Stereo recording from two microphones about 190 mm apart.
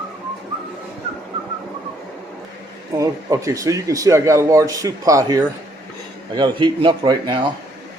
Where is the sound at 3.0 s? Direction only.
15° right (ahead or behind).